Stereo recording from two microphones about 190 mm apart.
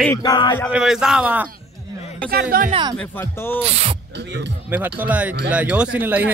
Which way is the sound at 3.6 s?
35° right (ahead or behind).